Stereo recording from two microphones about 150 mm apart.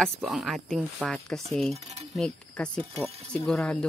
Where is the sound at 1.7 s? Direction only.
45° right (ahead or behind).